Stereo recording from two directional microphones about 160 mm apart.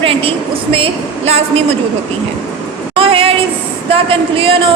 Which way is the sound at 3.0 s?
35° right (ahead or behind).